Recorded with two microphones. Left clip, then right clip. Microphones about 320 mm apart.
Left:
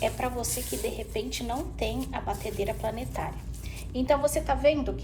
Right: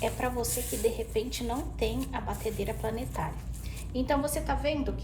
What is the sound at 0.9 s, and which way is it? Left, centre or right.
A woman's voice, centre.